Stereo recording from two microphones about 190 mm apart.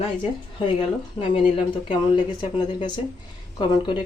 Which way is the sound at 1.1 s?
25° left (ahead or behind).